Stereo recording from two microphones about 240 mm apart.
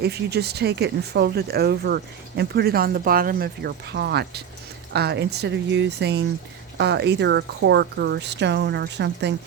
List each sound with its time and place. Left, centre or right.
0.0 s speech: right